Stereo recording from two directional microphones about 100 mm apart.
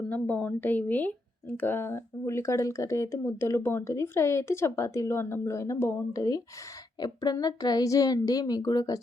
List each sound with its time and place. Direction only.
0.1 s a woman's voice: 15° left (ahead or behind); by 9.0 s 40° left (ahead or behind)